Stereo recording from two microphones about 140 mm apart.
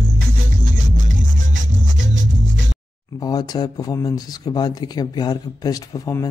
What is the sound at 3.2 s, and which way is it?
Speech, 25° left (ahead or behind).